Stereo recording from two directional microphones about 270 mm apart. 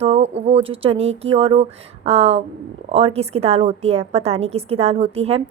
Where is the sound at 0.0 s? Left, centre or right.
Right.